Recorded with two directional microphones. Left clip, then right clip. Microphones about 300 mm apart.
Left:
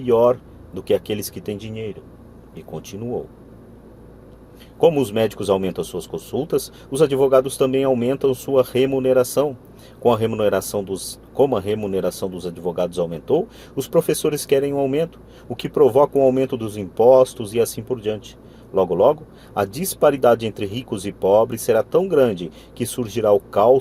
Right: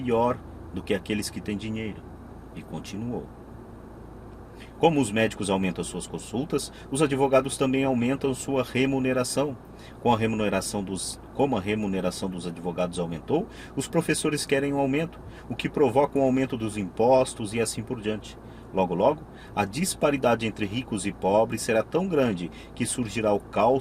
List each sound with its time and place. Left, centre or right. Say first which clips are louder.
0.0 s speech: left 9 dB; left
4.8 s speech: left 6 dB; left